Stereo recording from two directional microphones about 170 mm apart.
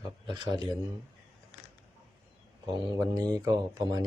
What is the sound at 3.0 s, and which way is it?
Speech, 20° right (ahead or behind).